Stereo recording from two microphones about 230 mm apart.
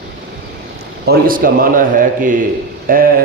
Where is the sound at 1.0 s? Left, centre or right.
Right.